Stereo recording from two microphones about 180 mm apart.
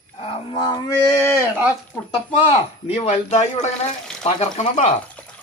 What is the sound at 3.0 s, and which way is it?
Speech, 40° left (ahead or behind).